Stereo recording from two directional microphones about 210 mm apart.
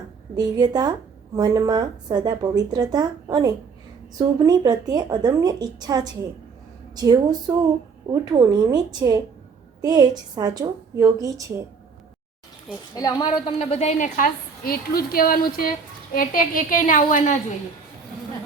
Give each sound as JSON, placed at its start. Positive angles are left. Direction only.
{"t": 0.3, "sound": "a woman's voice", "side_deg": -20}
{"t": 12.9, "sound": "a woman's voice", "side_deg": 20}